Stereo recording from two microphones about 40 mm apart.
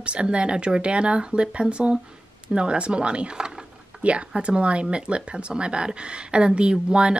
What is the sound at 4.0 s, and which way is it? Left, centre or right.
Speech, right.